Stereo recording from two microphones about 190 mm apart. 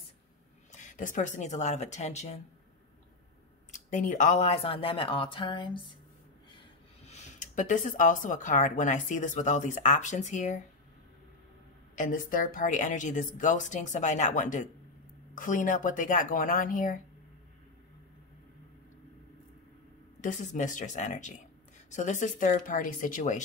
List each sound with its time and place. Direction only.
0.7 s speech: 40° left (ahead or behind)
3.7 s speech: 40° left (ahead or behind); by 5.9 s 25° left (ahead or behind)
7.1 s speech: 40° left (ahead or behind)
11.9 s a woman's voice: 45° left (ahead or behind)
20.2 s speech: 40° left (ahead or behind)